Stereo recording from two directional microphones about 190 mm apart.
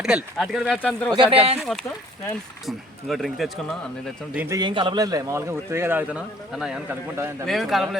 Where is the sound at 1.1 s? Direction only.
25° right (ahead or behind).